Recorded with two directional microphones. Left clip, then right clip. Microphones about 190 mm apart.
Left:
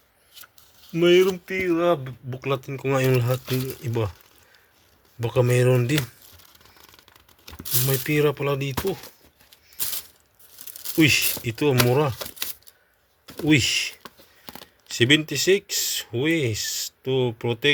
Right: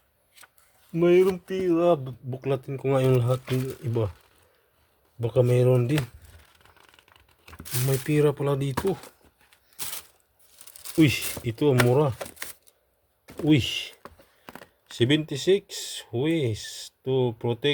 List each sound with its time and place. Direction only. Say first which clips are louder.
0.9 s speech: left 2 dB; 5° right (ahead or behind)
1.3 s speech: left 1 dB; 25° right (ahead or behind); by 4.1 s 10° right (ahead or behind)
5.2 s speech: left 1 dB; 5° right (ahead or behind)
7.6 s speech: left 3 dB; 20° right (ahead or behind)
10.9 s speech: left 4 dB; 15° right (ahead or behind)
13.3 s speech: left 3 dB; 10° right (ahead or behind)